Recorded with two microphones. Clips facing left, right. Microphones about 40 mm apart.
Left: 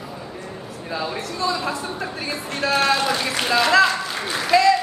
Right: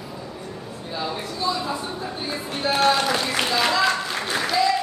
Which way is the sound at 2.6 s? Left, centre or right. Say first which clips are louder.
Left 2 dB; left.